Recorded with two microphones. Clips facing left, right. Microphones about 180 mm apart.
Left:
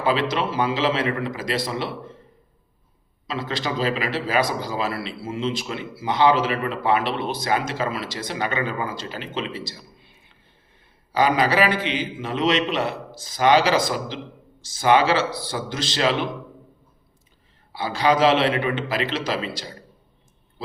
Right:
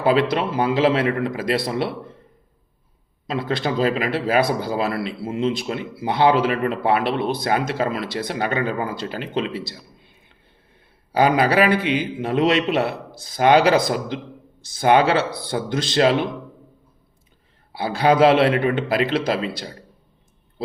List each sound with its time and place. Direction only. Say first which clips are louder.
0.0 s a man's voice: right 4 dB; 55° right (ahead or behind)
3.2 s a man's voice: right 4 dB; 55° right (ahead or behind)
11.1 s a man's voice: right 3 dB; 55° right (ahead or behind)
17.7 s a man's voice: right 3 dB; 55° right (ahead or behind)